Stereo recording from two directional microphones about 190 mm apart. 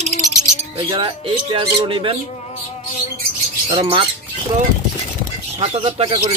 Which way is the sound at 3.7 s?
25° right (ahead or behind).